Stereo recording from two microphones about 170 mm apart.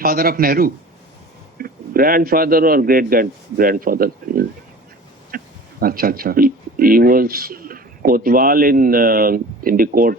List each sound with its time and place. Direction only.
0.0 s a man's voice: 60° right (ahead or behind)
5.3 s a sound: 60° right (ahead or behind)
5.8 s a man's voice: 60° right (ahead or behind)